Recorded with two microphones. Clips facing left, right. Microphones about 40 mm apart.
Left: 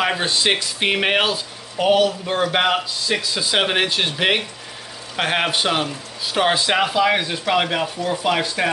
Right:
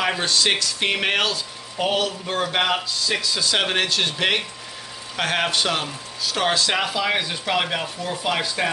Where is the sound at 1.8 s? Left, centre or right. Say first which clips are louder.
Left 6 dB; centre.